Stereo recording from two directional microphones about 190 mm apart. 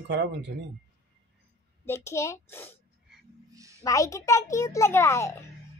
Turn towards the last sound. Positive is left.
turn(degrees=15)  # may be behind; listen again after turning